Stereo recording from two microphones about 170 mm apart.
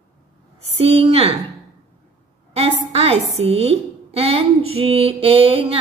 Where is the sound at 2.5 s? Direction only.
35° right (ahead or behind).